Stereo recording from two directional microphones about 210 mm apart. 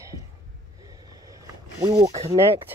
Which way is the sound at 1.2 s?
15° right (ahead or behind).